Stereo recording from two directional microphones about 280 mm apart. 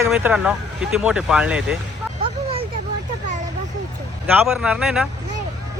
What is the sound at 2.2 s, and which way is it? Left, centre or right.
Vehicle, right.